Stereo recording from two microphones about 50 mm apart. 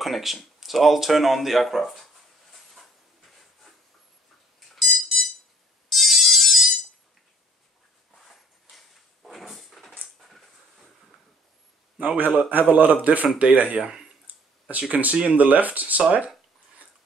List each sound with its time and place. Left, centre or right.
0.0 s speech: centre
4.6 s smoke detector: centre
5.9 s ringtone: centre
8.3 s a sound: centre
12.4 s a man's voice: right